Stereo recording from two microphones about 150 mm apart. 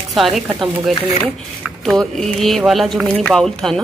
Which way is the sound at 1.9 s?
Centre (ahead or behind).